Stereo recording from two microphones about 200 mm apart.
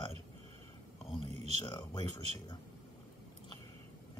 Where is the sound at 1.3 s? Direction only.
35° right (ahead or behind).